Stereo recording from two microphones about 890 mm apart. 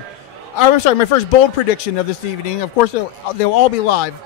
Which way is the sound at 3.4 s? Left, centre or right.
Left.